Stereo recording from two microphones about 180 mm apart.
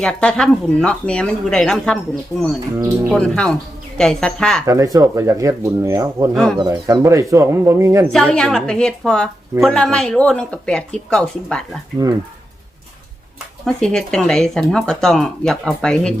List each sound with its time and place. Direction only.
0.0 s a woman's voice: 5° left (ahead or behind)
2.7 s speech: 15° right (ahead or behind)
3.2 s a woman's voice: 5° left (ahead or behind)
4.6 s speech: 20° right (ahead or behind)
8.1 s a woman's voice: 5° left (ahead or behind)
12.0 s speech: 15° right (ahead or behind)
13.7 s a woman's voice: 5° left (ahead or behind)